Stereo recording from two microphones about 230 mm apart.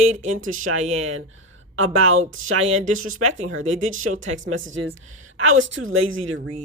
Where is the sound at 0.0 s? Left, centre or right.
Right.